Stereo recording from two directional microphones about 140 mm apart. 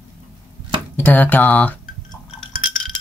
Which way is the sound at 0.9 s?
10° left (ahead or behind).